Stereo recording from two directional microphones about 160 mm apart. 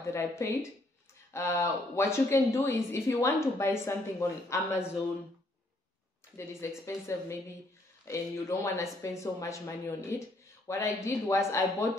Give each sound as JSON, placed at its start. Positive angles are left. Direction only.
{"t": 0.0, "sound": "speech", "side_deg": 20}
{"t": 6.3, "sound": "speech", "side_deg": 15}